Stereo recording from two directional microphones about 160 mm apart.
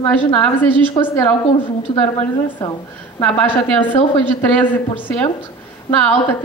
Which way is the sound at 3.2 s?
5° left (ahead or behind).